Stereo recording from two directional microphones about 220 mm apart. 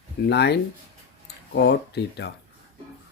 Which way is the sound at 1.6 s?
50° left (ahead or behind).